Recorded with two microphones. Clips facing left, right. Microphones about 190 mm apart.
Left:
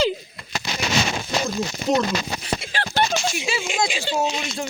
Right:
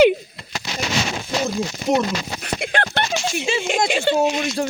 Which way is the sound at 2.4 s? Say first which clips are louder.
Right 4 dB; 55° right (ahead or behind).